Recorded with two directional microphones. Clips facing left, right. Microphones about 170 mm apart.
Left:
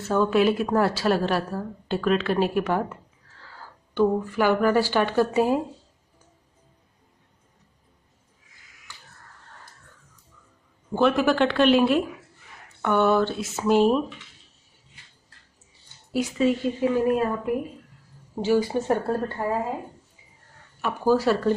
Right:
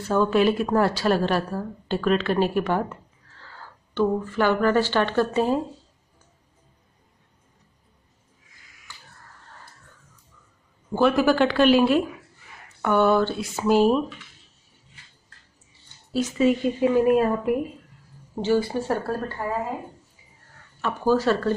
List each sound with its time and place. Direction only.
0.0 s a woman's voice: 5° left (ahead or behind)
10.9 s a woman's voice: 5° right (ahead or behind)
16.3 s speech: 15° right (ahead or behind)
18.4 s speech: 10° left (ahead or behind)
20.8 s speech: 10° left (ahead or behind)